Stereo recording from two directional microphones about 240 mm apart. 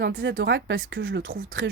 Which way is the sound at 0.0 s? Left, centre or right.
Right.